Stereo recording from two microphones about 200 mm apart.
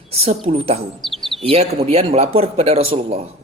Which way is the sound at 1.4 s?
30° right (ahead or behind).